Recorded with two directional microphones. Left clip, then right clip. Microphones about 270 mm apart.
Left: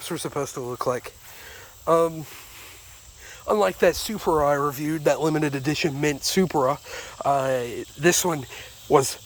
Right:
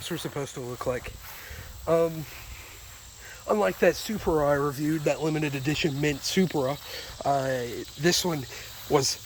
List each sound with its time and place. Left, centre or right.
0.0 s speech: centre
3.4 s speech: centre